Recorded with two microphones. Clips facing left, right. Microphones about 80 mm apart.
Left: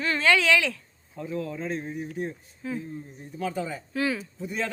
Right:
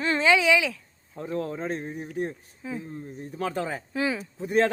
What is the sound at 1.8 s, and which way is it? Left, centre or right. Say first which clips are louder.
Speech: left 1 dB; right.